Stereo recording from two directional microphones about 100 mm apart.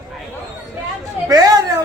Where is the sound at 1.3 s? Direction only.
40° right (ahead or behind).